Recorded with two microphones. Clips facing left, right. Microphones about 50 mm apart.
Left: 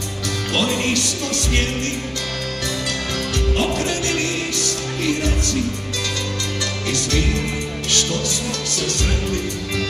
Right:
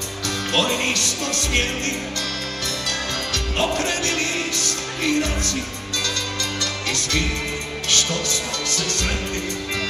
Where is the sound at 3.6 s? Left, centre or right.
Right.